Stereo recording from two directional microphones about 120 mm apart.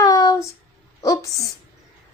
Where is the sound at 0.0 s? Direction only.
30° left (ahead or behind).